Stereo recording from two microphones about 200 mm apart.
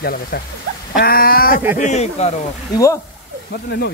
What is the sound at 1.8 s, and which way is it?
Speech, 35° left (ahead or behind).